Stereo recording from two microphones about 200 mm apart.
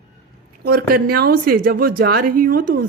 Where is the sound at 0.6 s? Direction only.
50° right (ahead or behind).